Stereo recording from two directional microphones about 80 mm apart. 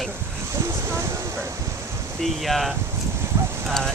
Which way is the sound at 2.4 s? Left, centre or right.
Centre.